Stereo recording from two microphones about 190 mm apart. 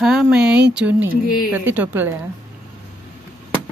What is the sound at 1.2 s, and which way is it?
Speech, 50° left (ahead or behind).